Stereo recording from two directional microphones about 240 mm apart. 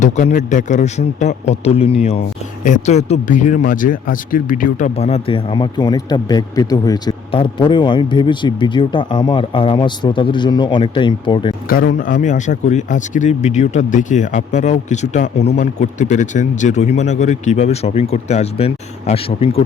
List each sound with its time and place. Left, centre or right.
0.0 s speech: left
11.7 s a man's voice: left